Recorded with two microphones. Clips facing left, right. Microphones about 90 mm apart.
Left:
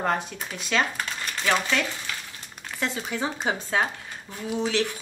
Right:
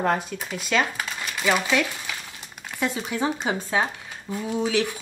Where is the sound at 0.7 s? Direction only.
5° right (ahead or behind).